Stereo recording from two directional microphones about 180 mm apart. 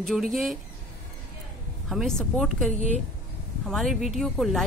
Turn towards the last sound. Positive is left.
turn(degrees=0)  # may be behind; listen again after turning